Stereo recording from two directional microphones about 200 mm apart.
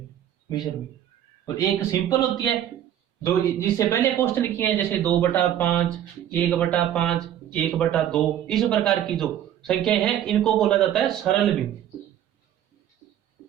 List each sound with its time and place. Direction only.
0.4 s a man's voice: 20° left (ahead or behind); by 11.5 s centre (ahead or behind)